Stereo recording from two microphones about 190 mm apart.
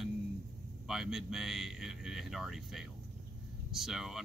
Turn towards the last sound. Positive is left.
turn(degrees=0)  # may be behind; listen again after turning